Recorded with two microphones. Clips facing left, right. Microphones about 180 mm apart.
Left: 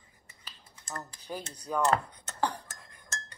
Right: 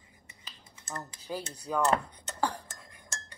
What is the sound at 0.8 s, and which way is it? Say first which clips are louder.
Dishes: right 1 dB; 5° right (ahead or behind).